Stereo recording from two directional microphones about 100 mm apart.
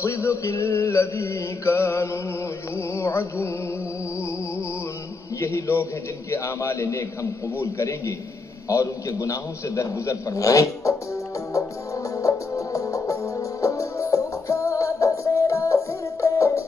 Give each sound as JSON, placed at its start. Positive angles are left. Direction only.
{"t": 0.0, "sound": "a man's voice", "side_deg": 30}
{"t": 2.9, "sound": "music", "side_deg": 30}
{"t": 5.4, "sound": "a sound", "side_deg": 30}
{"t": 6.3, "sound": "a man's voice", "side_deg": 30}
{"t": 12.2, "sound": "music", "side_deg": 35}